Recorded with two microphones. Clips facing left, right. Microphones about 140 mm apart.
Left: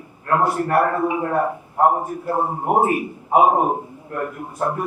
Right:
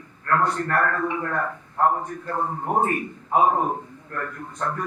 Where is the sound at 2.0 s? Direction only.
10° left (ahead or behind).